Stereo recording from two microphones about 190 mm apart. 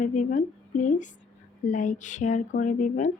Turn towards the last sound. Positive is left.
turn(degrees=40)  # may be behind; listen again after turning